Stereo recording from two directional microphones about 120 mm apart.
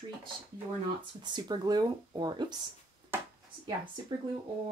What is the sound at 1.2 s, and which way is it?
Speech, 35° right (ahead or behind).